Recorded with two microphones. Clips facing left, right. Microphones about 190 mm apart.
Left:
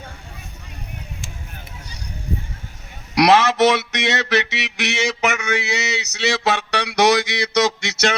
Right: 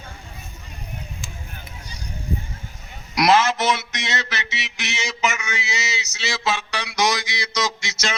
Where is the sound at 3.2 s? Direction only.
65° left (ahead or behind).